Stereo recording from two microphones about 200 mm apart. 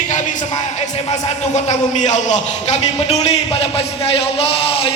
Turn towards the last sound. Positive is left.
turn(degrees=30)  # may be behind; listen again after turning